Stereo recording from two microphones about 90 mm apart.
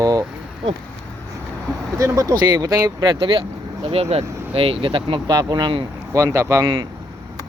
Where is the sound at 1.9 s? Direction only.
35° right (ahead or behind).